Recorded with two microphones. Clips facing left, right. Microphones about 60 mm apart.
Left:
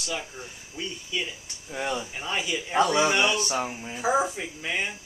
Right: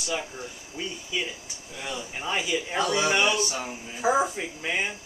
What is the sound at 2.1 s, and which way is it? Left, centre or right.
Speech, centre.